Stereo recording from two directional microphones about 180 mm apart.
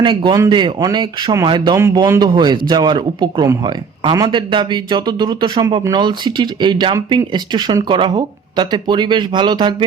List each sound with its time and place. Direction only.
0.0 s speech: 25° right (ahead or behind)